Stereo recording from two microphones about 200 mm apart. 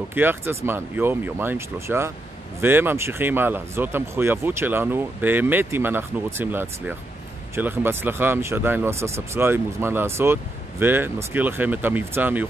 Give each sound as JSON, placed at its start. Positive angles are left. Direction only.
{"t": 0.1, "sound": "speech", "side_deg": -10}